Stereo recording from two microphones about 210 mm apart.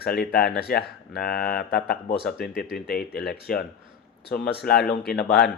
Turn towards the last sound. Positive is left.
turn(degrees=50)  # may be behind; listen again after turning